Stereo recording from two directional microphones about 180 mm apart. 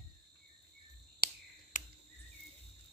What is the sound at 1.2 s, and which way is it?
Finger snapping, 50° left (ahead or behind).